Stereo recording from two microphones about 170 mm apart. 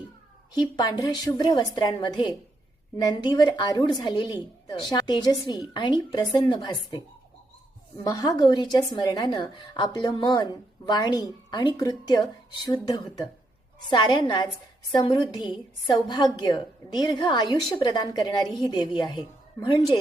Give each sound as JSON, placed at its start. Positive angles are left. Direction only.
{"t": 0.5, "sound": "a woman's voice", "side_deg": 25}
{"t": 8.0, "sound": "a woman's voice", "side_deg": 20}